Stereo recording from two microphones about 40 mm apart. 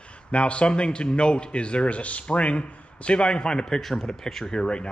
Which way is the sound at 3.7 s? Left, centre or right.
Centre.